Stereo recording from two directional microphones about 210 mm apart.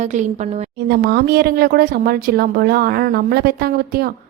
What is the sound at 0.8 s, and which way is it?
A woman's voice, 50° right (ahead or behind).